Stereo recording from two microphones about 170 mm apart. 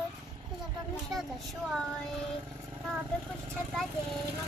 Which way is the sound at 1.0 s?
Centre (ahead or behind).